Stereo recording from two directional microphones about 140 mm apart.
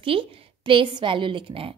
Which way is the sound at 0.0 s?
40° right (ahead or behind).